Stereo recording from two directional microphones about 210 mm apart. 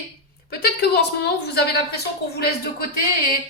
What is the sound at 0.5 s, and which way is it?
A woman's voice, 50° left (ahead or behind).